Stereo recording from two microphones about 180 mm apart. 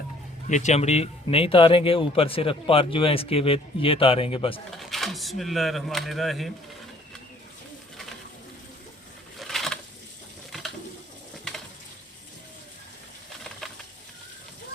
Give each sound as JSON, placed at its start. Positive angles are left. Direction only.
{"t": 0.4, "sound": "speech", "side_deg": 40}
{"t": 4.8, "sound": "speech", "side_deg": 0}
{"t": 9.4, "sound": "a sound", "side_deg": 0}